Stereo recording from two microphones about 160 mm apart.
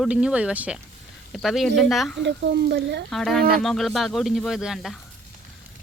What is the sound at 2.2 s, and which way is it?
Speech, 90° right.